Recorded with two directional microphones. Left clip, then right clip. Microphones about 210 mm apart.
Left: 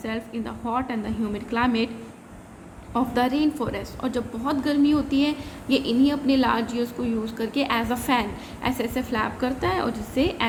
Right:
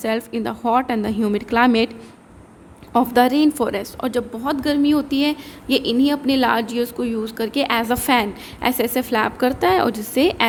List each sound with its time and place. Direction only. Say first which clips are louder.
0.0 s a woman's voice: right 9 dB; 50° right (ahead or behind)
2.9 s a woman's voice: right 8 dB; 50° right (ahead or behind)